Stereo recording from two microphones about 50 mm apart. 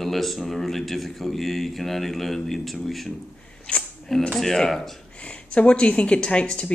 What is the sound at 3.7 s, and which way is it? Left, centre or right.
Speech, centre.